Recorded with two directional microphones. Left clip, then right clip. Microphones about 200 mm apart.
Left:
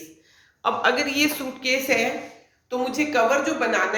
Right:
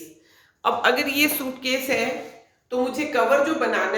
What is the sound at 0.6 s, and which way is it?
Speech, 5° right (ahead or behind).